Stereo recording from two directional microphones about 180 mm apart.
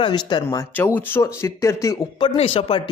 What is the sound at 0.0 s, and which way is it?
A man's voice, 25° left (ahead or behind).